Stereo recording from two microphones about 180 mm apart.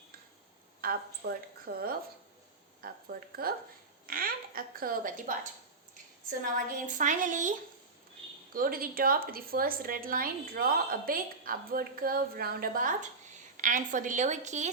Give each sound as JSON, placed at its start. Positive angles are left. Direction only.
{"t": 0.8, "sound": "a woman's voice", "side_deg": -55}
{"t": 8.5, "sound": "a woman's voice", "side_deg": -55}